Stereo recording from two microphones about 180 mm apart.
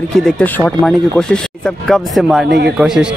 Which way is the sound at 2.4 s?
75° right (ahead or behind).